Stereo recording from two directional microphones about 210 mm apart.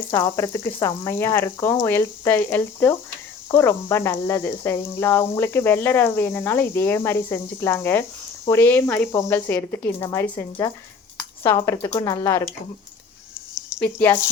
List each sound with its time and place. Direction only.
0.1 s speech: 15° left (ahead or behind)
13.5 s a sound: 5° right (ahead or behind)
13.7 s speech: 10° left (ahead or behind)